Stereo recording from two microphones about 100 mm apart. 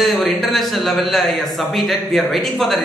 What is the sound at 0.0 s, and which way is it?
A man's voice, centre (ahead or behind).